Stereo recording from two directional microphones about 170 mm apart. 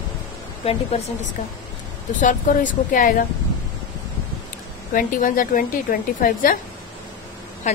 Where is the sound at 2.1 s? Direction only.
50° left (ahead or behind).